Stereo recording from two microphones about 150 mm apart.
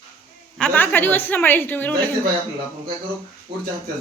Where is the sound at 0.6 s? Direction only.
10° left (ahead or behind).